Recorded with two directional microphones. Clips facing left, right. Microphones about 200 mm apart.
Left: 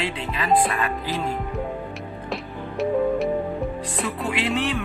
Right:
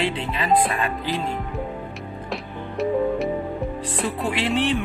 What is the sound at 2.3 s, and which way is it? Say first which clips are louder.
Music: even; centre (ahead or behind).